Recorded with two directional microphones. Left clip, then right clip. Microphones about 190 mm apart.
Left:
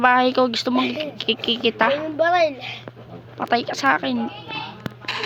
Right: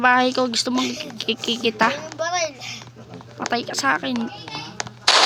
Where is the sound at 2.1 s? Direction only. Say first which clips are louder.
Left 6 dB; 45° left (ahead or behind).